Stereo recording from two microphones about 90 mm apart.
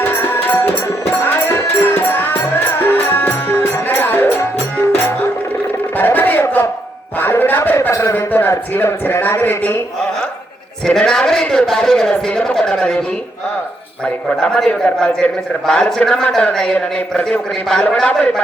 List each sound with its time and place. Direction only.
1.2 s music: 25° left (ahead or behind)
6.0 s music: 20° left (ahead or behind)
7.8 s a sound: 35° left (ahead or behind)
8.1 s a man's voice: 20° left (ahead or behind)
10.8 s a man's voice: 5° left (ahead or behind)
14.3 s a man's voice: 10° left (ahead or behind)